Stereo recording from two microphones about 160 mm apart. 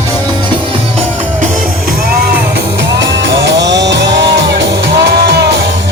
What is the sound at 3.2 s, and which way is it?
Music, 90° right.